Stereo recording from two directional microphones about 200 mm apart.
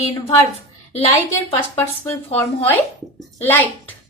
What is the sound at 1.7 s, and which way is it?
Speech, 10° left (ahead or behind).